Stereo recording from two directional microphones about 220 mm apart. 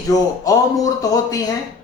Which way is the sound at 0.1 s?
15° left (ahead or behind).